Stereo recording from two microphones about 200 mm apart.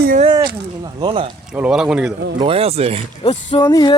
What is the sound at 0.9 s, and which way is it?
Speech, 25° right (ahead or behind).